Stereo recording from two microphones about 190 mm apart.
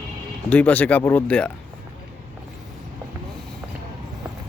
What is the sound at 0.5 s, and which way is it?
Speech, 10° left (ahead or behind).